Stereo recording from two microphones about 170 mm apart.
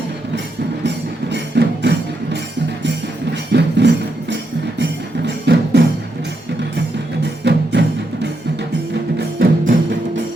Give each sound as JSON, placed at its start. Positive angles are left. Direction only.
{"t": 0.9, "sound": "music", "side_deg": -85}
{"t": 3.5, "sound": "music", "side_deg": -90}
{"t": 7.4, "sound": "music", "side_deg": -80}